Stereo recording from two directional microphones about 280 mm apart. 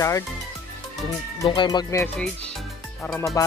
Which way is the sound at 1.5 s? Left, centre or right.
Centre.